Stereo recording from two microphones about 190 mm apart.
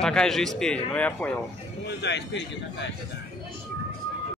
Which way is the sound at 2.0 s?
65° left (ahead or behind).